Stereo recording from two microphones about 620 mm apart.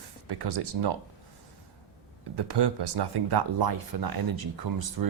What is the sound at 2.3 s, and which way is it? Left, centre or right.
Speech, right.